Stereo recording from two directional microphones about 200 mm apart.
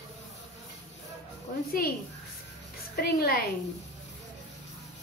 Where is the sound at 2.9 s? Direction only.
50° left (ahead or behind).